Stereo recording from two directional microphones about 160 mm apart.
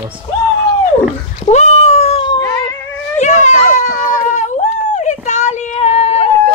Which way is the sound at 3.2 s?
50° left (ahead or behind).